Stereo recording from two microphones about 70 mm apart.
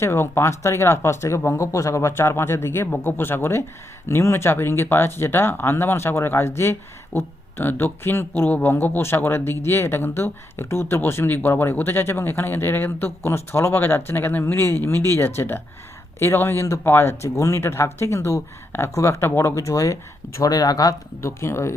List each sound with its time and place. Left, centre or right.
0.0 s speech: left
20.4 s speech: left
21.2 s speech: left